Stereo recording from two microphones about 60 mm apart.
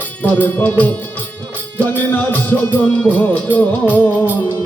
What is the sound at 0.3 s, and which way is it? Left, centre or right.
Music, left.